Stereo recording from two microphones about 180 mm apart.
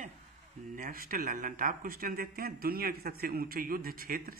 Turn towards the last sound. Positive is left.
turn(degrees=-55)  # may be behind; listen again after turning